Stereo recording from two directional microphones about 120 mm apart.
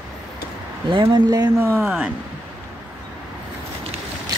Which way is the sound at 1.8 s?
5° right (ahead or behind).